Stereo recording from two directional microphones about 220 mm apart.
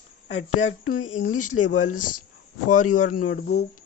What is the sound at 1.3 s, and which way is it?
Speech, 90° left.